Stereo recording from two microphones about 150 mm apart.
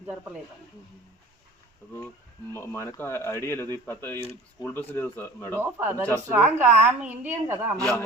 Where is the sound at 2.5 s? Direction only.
15° left (ahead or behind).